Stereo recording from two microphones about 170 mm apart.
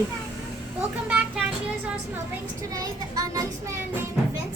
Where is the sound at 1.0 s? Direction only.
5° right (ahead or behind).